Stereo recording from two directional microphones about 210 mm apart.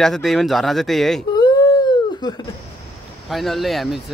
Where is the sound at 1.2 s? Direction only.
20° left (ahead or behind).